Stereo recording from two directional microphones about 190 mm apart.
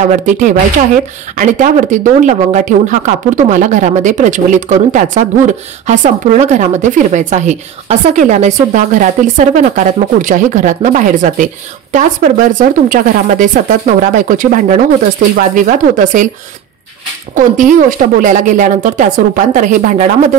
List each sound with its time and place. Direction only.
1.3 s speech: 40° right (ahead or behind)
17.4 s speech: 40° right (ahead or behind)